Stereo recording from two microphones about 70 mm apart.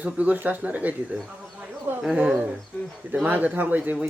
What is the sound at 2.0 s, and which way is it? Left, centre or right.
A man's voice, centre.